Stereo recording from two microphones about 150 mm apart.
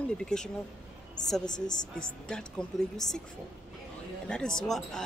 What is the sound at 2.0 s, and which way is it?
Speech, 5° left (ahead or behind).